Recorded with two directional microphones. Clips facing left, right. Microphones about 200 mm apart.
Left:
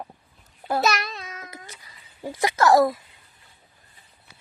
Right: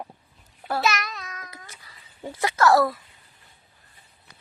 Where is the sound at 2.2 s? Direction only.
15° left (ahead or behind).